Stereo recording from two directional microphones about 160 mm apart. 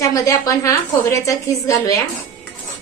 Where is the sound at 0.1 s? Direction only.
20° left (ahead or behind).